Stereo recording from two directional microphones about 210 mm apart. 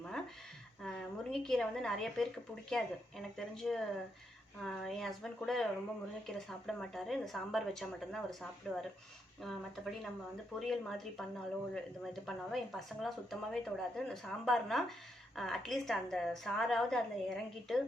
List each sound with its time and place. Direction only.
0.8 s a woman's voice: centre (ahead or behind)